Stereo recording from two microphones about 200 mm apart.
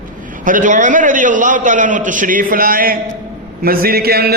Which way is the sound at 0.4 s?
40° right (ahead or behind).